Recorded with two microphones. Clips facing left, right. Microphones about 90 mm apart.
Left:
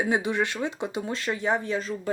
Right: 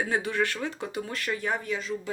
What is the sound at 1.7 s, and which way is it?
Speech, 40° left (ahead or behind).